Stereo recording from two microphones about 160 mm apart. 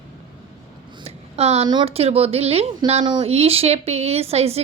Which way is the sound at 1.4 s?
40° right (ahead or behind).